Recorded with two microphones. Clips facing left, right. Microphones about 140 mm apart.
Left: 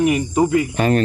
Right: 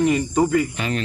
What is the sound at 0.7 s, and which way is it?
Speech, 45° left (ahead or behind).